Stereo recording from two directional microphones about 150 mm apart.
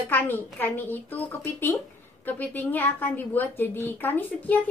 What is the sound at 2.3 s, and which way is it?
A woman's voice, 10° left (ahead or behind).